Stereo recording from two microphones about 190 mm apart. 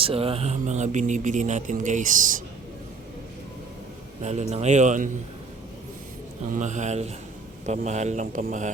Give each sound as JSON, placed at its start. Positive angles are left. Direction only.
{"t": 0.0, "sound": "speech", "side_deg": -30}
{"t": 4.2, "sound": "speech", "side_deg": -35}
{"t": 6.5, "sound": "speech", "side_deg": -40}